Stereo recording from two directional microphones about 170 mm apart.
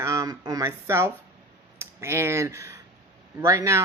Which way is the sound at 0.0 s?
20° right (ahead or behind).